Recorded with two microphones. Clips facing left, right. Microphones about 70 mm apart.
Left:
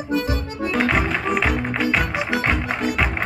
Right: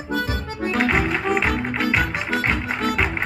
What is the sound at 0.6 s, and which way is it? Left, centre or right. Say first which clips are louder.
Music: even; centre.